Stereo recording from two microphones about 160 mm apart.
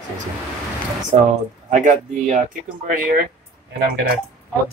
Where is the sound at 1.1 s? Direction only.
45° right (ahead or behind).